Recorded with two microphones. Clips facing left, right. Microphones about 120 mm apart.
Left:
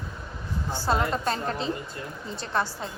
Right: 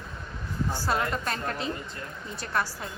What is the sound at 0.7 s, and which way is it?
A woman's voice, 25° left (ahead or behind).